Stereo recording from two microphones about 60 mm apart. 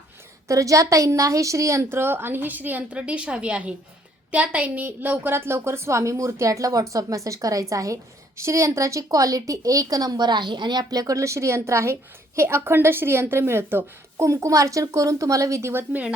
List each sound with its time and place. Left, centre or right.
0.4 s a woman's voice: right
8.4 s a woman's voice: right
14.2 s a woman's voice: right
15.7 s a woman's voice: right